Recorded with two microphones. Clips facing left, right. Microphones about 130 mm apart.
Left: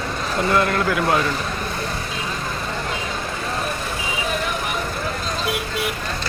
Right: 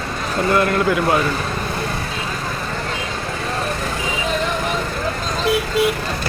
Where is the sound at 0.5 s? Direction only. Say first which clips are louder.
Right 3 dB; centre (ahead or behind).